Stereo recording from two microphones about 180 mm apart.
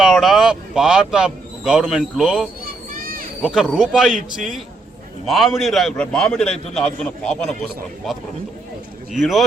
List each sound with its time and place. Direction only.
0.0 s speech: centre (ahead or behind)
2.9 s a sound: 50° right (ahead or behind)
3.4 s speech: 5° right (ahead or behind)